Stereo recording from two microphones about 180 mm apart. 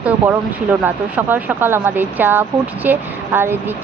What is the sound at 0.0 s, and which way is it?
Speech, 10° right (ahead or behind).